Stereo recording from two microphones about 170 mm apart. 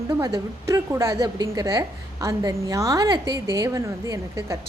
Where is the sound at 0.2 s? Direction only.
20° right (ahead or behind).